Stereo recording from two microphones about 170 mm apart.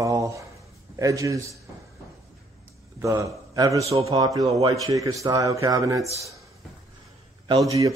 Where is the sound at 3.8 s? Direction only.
35° right (ahead or behind).